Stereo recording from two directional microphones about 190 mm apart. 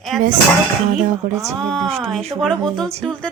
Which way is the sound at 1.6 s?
5° left (ahead or behind).